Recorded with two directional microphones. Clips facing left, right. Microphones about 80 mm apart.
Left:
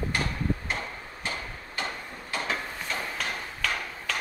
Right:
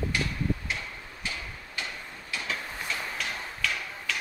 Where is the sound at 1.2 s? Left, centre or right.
Left.